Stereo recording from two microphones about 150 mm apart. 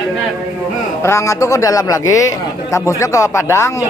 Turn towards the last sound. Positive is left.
turn(degrees=20)  # may be behind; listen again after turning